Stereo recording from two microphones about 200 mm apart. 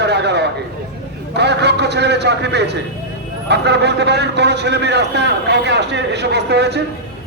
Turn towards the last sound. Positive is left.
turn(degrees=-60)  # may be behind; listen again after turning